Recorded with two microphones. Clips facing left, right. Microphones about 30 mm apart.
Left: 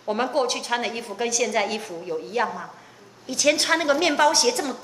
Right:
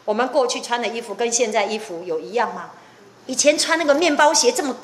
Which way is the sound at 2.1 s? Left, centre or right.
Right.